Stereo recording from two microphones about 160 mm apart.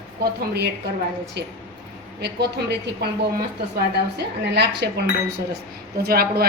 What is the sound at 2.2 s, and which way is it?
Speech, 90° right.